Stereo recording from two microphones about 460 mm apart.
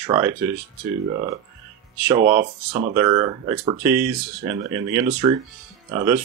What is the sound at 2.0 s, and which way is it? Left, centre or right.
Speech, centre.